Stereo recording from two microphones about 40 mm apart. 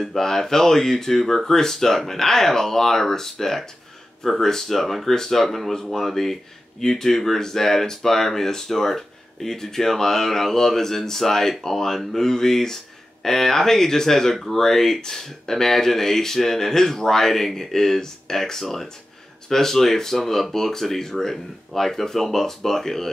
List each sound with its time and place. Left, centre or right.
0.0 s speech: centre